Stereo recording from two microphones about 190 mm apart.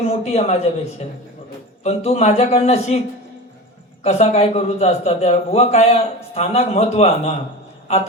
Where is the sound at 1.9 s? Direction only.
35° left (ahead or behind).